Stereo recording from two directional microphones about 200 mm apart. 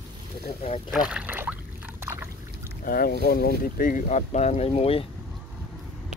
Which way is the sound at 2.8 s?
50° left (ahead or behind).